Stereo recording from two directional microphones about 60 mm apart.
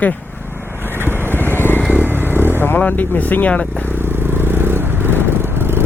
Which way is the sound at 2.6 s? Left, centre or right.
Left.